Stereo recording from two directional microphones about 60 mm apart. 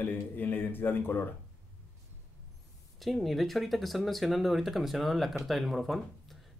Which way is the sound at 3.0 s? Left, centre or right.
Centre.